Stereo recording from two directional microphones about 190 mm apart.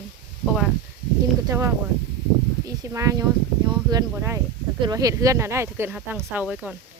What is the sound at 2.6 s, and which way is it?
Speech, 15° right (ahead or behind).